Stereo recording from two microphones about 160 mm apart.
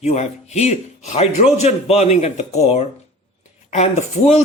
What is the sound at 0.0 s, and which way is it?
A man's voice, 45° left (ahead or behind).